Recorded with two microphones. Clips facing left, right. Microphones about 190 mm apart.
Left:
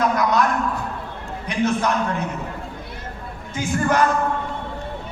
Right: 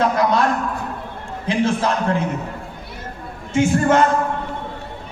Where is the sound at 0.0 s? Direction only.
30° right (ahead or behind).